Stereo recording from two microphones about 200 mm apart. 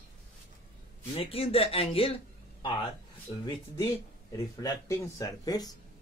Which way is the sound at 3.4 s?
15° left (ahead or behind).